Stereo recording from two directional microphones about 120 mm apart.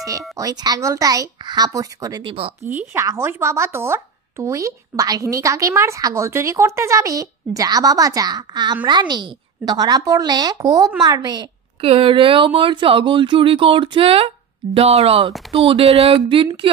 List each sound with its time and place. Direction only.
0.4 s speech: 35° right (ahead or behind)
2.2 s speech: 50° right (ahead or behind)
2.9 s a woman's voice: 25° right (ahead or behind)
11.8 s speech: 50° right (ahead or behind)